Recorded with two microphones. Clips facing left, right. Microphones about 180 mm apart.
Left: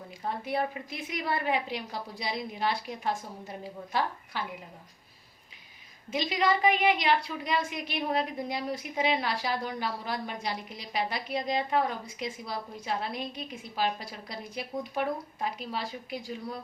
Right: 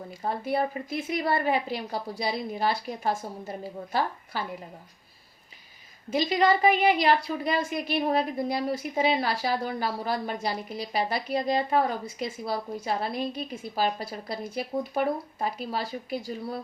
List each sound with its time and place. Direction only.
0.2 s a woman's voice: 40° right (ahead or behind)
6.1 s a woman's voice: 40° right (ahead or behind)